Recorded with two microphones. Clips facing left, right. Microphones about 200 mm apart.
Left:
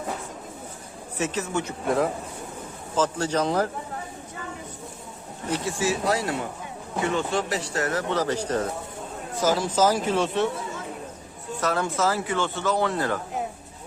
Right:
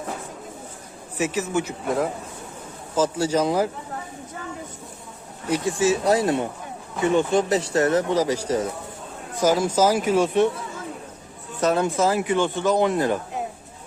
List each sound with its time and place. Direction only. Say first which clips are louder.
1.2 s speech: right 3 dB; 10° right (ahead or behind)
5.5 s speech: right 4 dB; 10° right (ahead or behind)
5.8 s speech: right 6 dB; 25° right (ahead or behind)
8.1 s speech: right 3 dB; 10° right (ahead or behind)
11.6 s speech: right 4 dB; 20° right (ahead or behind)